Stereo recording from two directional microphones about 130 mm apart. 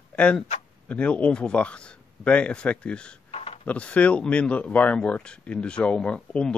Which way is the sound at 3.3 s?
45° left (ahead or behind).